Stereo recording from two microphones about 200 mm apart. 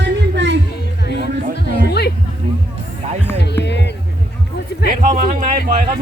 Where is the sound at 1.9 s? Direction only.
55° left (ahead or behind).